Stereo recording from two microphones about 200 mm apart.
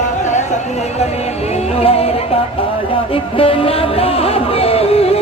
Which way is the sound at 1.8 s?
30° left (ahead or behind).